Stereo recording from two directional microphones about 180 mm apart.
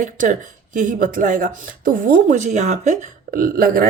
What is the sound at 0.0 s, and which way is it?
Speech, 45° right (ahead or behind).